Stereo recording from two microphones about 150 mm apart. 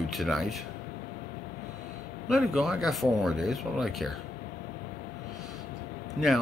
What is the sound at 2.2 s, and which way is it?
Speech, centre (ahead or behind).